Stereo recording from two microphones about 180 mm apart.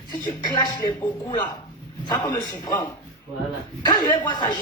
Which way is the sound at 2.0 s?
20° left (ahead or behind).